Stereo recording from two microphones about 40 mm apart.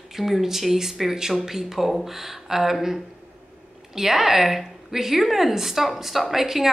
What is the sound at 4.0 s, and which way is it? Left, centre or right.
A woman's voice, centre.